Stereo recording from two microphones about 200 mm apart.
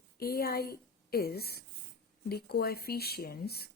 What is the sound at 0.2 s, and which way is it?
A woman's voice, 50° left (ahead or behind).